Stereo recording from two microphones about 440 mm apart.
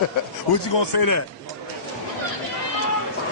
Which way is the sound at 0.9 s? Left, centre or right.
Left.